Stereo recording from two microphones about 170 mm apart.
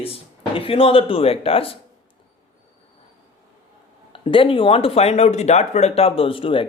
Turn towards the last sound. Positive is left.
turn(degrees=30)  # may be behind; listen again after turning